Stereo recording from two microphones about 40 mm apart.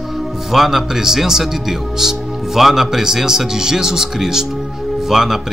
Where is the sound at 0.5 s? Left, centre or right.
Centre.